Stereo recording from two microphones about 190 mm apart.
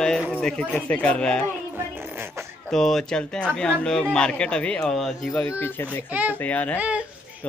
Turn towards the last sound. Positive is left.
turn(degrees=10)  # may be behind; listen again after turning